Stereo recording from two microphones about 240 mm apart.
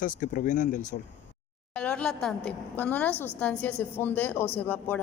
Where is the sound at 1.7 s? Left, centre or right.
Centre.